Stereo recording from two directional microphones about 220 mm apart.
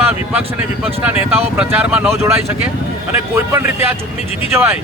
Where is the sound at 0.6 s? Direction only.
5° right (ahead or behind).